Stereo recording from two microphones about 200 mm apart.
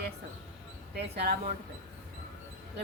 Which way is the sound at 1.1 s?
55° right (ahead or behind).